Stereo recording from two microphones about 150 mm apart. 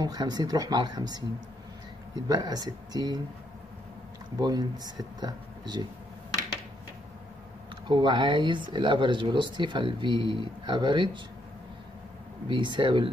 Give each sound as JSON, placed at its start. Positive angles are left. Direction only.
{"t": 0.0, "sound": "speech", "side_deg": -25}
{"t": 4.4, "sound": "speech", "side_deg": -25}
{"t": 7.9, "sound": "speech", "side_deg": -30}
{"t": 12.4, "sound": "speech", "side_deg": -30}